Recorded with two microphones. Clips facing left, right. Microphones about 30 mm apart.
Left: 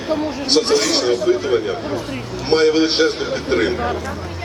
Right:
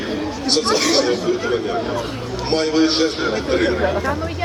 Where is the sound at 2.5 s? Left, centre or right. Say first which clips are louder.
Left 2 dB; centre.